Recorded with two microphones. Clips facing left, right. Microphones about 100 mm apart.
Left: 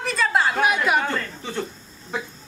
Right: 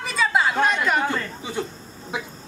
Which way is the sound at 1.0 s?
10° right (ahead or behind).